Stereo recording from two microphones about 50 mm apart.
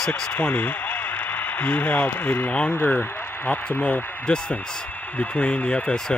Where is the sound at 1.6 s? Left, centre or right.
Left.